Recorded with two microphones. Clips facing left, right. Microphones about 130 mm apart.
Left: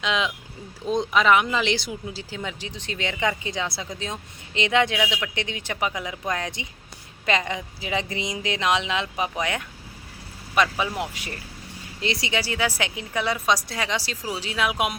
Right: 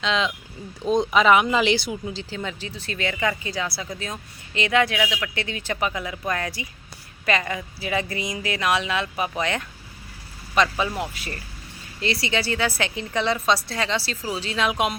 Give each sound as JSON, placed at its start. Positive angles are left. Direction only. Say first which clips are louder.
{"t": 0.0, "sound": "a woman's voice", "louder": "right 1 dB", "side_deg": 10}
{"t": 0.9, "sound": "speech", "louder": "right 2 dB", "side_deg": 0}
{"t": 2.1, "sound": "a woman's voice", "louder": "right 2 dB", "side_deg": 15}